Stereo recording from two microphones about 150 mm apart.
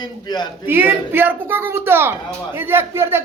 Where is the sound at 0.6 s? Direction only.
15° right (ahead or behind).